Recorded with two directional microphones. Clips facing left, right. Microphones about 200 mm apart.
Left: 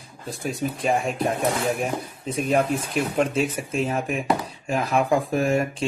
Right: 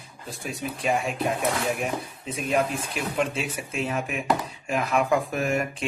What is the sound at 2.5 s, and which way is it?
Speech, 40° left (ahead or behind).